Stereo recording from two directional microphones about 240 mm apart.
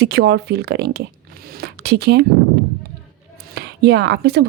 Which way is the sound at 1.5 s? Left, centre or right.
Right.